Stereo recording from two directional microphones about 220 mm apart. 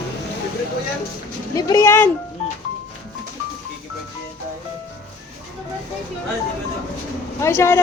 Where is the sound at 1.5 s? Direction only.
15° left (ahead or behind).